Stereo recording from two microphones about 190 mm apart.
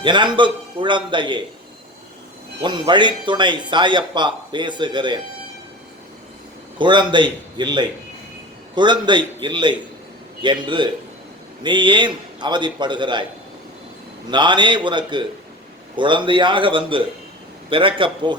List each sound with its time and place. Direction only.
0.0 s speech: 25° right (ahead or behind)
2.6 s speech: 25° right (ahead or behind)
6.7 s speech: 25° right (ahead or behind)
14.3 s speech: 25° right (ahead or behind)